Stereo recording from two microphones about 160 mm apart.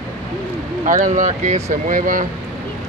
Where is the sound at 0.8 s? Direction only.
55° right (ahead or behind).